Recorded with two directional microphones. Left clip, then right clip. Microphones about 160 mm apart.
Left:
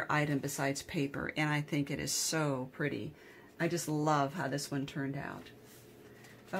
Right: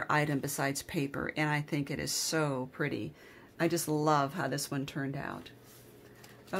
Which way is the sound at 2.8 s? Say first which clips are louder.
Right 2 dB; 35° right (ahead or behind).